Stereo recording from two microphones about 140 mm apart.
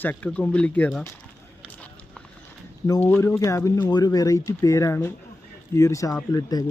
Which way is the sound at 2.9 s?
15° left (ahead or behind).